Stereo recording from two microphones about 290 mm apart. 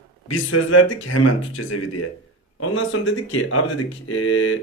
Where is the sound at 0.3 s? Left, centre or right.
Left.